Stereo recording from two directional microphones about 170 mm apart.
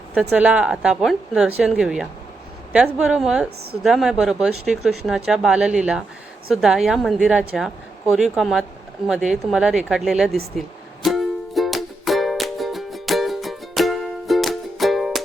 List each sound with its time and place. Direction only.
0.1 s speech: 5° right (ahead or behind)
10.6 s music: centre (ahead or behind)